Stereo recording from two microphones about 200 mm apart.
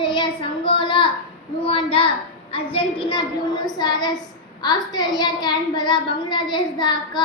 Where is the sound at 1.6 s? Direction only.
30° left (ahead or behind).